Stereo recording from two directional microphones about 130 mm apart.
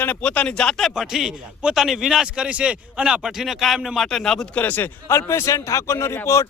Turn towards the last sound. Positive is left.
turn(degrees=20)  # may be behind; listen again after turning